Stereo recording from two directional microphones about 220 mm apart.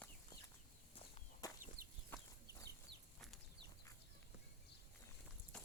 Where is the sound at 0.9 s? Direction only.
15° left (ahead or behind).